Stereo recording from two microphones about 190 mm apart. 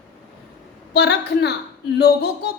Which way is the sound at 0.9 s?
60° left (ahead or behind).